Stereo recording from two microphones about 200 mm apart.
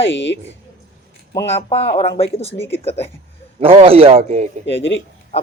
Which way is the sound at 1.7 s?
30° left (ahead or behind).